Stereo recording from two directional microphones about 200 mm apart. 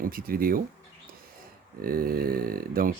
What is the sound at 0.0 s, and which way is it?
Speech, 45° right (ahead or behind).